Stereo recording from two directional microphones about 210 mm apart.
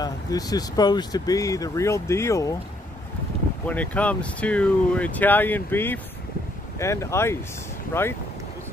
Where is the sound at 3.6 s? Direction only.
5° left (ahead or behind).